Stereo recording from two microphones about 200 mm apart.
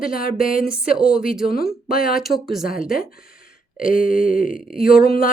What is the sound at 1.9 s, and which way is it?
Speech, 45° left (ahead or behind).